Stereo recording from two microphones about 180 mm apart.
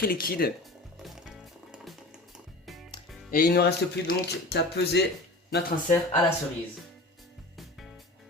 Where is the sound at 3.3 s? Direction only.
55° left (ahead or behind).